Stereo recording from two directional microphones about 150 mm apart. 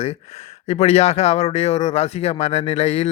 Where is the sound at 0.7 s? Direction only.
45° left (ahead or behind).